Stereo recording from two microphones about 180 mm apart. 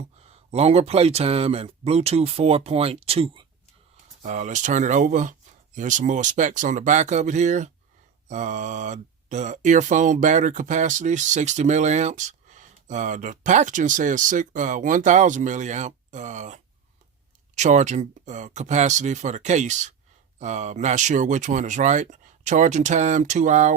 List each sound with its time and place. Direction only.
0.0 s speech: 35° right (ahead or behind)